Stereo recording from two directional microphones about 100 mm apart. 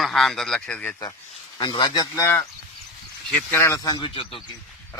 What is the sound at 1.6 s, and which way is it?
Speech, 50° left (ahead or behind).